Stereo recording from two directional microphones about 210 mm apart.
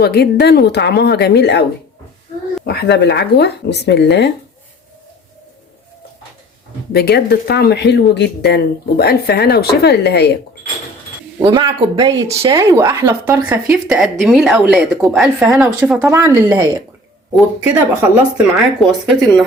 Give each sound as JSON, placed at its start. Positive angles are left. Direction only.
{"t": 0.0, "sound": "speech", "side_deg": 50}
{"t": 2.6, "sound": "speech", "side_deg": 50}
{"t": 6.9, "sound": "speech", "side_deg": 50}
{"t": 11.3, "sound": "speech", "side_deg": -20}